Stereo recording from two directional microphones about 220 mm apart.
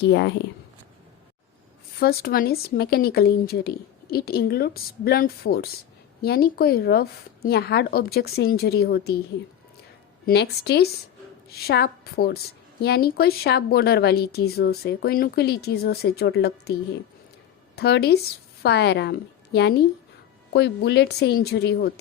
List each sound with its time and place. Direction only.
0.0 s a woman's voice: 55° left (ahead or behind)
2.0 s a woman's voice: 45° left (ahead or behind)
10.2 s a woman's voice: 45° left (ahead or behind)
17.7 s a woman's voice: 50° left (ahead or behind)